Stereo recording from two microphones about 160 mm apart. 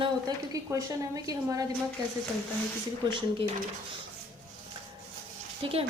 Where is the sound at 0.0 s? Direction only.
25° right (ahead or behind).